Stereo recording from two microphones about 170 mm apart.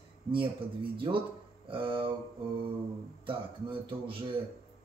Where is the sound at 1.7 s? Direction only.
30° right (ahead or behind).